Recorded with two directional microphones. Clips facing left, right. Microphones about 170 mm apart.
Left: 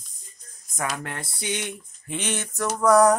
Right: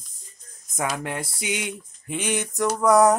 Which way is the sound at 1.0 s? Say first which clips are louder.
Right 4 dB; 15° right (ahead or behind).